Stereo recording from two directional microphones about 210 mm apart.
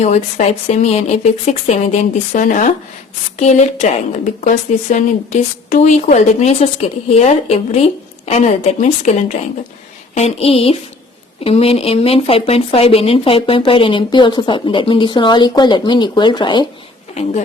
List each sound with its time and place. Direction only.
0.0 s a woman's voice: 30° left (ahead or behind)
10.2 s speech: 30° left (ahead or behind)